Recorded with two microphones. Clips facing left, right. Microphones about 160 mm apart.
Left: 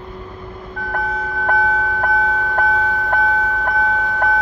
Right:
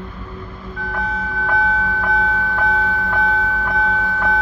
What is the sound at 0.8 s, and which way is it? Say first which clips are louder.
Vehicle: left 1 dB; 50° left (ahead or behind).